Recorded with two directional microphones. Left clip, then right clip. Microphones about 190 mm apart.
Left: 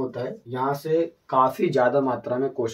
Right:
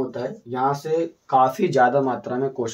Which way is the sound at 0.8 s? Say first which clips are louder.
Even; 30° right (ahead or behind).